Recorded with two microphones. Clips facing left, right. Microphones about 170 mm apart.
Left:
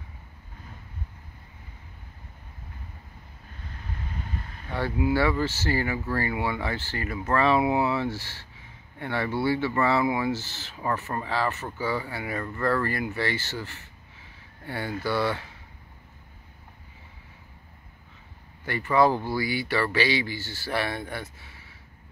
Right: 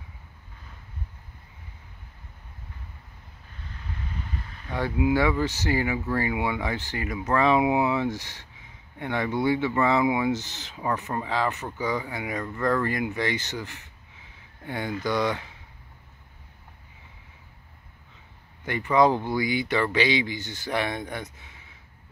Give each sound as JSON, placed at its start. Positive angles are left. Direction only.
{"t": 4.7, "sound": "speech", "side_deg": -15}
{"t": 18.7, "sound": "speech", "side_deg": -20}